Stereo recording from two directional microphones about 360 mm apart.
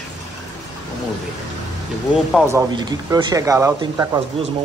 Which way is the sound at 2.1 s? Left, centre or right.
Centre.